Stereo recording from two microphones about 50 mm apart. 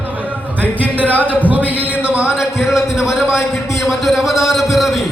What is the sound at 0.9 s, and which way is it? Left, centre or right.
A man's voice, right.